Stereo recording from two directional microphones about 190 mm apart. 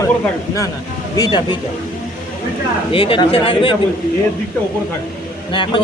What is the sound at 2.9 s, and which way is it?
Speech, 30° left (ahead or behind).